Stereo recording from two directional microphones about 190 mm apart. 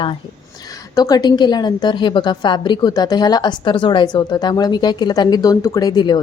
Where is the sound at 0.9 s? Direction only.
20° left (ahead or behind).